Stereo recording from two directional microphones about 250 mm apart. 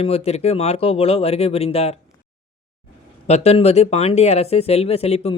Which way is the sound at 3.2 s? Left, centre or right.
Left.